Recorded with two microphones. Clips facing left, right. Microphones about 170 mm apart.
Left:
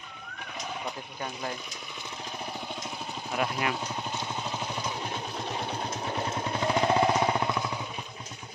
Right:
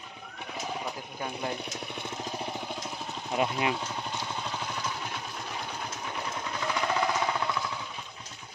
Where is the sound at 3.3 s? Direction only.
20° right (ahead or behind).